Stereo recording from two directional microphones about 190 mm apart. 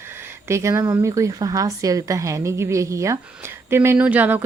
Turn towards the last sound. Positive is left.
turn(degrees=-10)  # may be behind; listen again after turning